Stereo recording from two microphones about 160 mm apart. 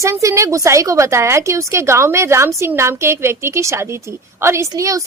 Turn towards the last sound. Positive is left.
turn(degrees=-20)  # may be behind; listen again after turning